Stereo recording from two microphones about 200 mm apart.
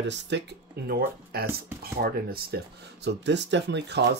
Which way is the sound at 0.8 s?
50° right (ahead or behind).